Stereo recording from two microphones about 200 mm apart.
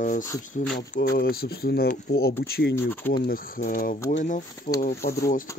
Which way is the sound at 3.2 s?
45° left (ahead or behind).